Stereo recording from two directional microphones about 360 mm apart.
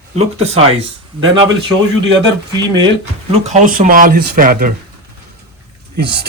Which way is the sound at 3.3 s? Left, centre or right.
Right.